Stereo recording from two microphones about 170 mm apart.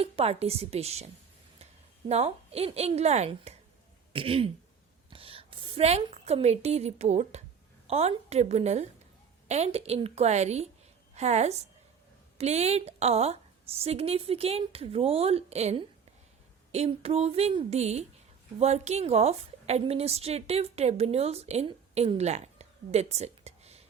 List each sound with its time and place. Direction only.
0.0 s a woman's voice: 35° right (ahead or behind)